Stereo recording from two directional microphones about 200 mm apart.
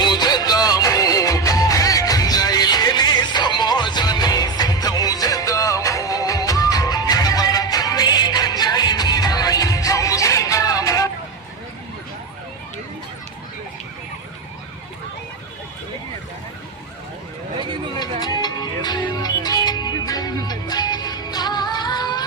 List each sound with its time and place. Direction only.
0.0 s music: 20° left (ahead or behind)
17.6 s vehicle: 25° right (ahead or behind)
18.2 s music: 20° left (ahead or behind)